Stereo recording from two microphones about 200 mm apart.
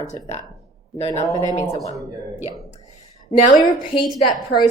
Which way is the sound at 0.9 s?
30° left (ahead or behind).